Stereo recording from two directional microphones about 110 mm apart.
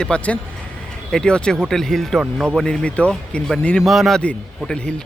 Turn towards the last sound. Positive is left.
turn(degrees=5)  # may be behind; listen again after turning